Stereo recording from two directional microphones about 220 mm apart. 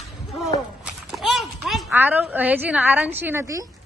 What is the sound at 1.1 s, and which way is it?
A woman's voice, centre (ahead or behind).